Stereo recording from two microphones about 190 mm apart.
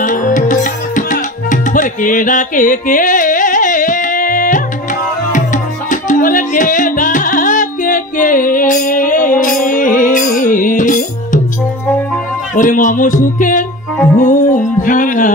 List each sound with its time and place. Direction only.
0.0 s tabla: 45° left (ahead or behind)
5.3 s music: 40° left (ahead or behind)
12.5 s music: 45° left (ahead or behind)